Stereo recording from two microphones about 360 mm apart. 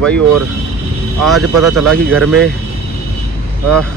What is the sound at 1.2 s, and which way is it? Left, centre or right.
A man's voice, centre.